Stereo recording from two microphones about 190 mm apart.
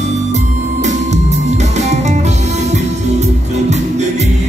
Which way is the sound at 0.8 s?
35° right (ahead or behind).